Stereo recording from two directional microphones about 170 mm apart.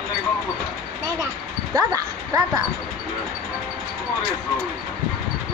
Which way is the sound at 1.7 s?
20° right (ahead or behind).